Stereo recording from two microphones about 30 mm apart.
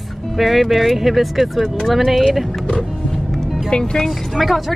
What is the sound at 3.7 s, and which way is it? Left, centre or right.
Speech, left.